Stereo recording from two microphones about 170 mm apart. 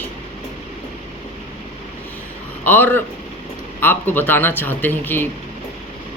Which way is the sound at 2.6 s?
10° left (ahead or behind).